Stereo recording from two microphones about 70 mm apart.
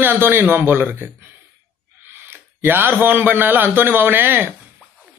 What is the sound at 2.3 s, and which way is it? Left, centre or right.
A man's voice, right.